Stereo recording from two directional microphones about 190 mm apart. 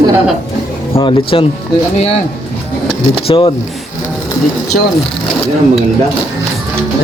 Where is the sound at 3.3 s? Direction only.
25° left (ahead or behind).